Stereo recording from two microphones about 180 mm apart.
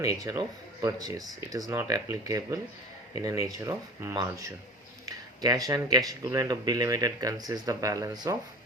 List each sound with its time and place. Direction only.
0.0 s speech: 20° right (ahead or behind)